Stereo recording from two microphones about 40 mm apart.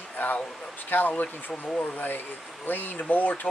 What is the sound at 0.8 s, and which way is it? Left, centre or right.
Speech, left.